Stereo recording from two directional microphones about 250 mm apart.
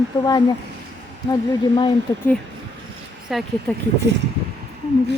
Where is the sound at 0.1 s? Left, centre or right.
Centre.